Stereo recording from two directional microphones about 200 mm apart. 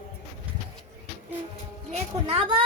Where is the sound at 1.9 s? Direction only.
30° right (ahead or behind).